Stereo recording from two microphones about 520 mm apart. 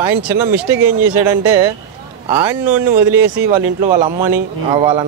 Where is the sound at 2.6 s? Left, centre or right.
Right.